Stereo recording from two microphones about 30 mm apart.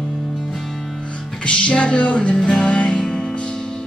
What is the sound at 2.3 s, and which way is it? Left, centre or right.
Music, left.